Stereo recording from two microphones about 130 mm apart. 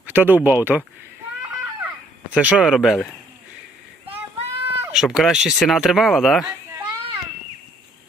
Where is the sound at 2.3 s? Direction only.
5° right (ahead or behind).